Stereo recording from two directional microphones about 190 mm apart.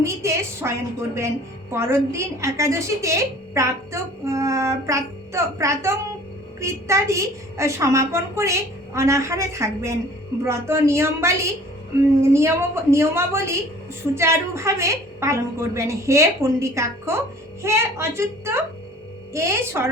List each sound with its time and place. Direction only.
0.0 s a woman's voice: 15° right (ahead or behind)